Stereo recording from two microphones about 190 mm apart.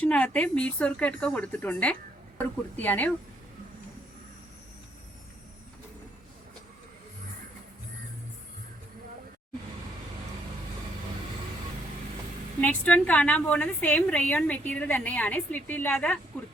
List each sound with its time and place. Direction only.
0.0 s a woman's voice: 5° left (ahead or behind)
12.5 s a woman's voice: 5° left (ahead or behind)